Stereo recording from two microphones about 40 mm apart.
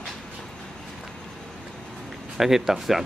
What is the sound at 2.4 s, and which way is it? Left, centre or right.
Speech, centre.